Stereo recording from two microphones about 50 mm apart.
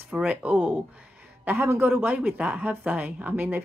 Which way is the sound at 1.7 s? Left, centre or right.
Right.